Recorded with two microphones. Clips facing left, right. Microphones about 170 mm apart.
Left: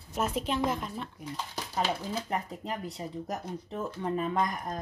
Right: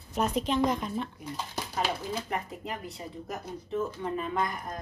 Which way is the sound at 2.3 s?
35° left (ahead or behind).